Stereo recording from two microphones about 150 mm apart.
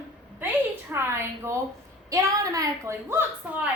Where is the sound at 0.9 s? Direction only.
15° right (ahead or behind).